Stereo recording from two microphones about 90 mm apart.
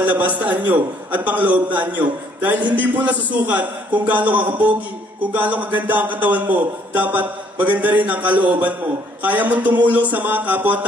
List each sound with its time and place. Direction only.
0.2 s a man's voice: 15° right (ahead or behind)